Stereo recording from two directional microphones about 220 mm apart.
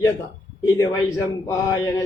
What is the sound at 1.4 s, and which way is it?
Speech, 15° left (ahead or behind).